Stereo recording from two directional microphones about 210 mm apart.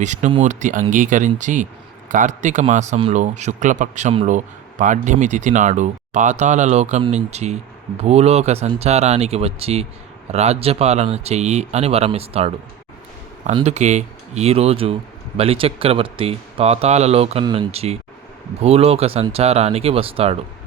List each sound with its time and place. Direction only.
0.0 s speech: 35° right (ahead or behind)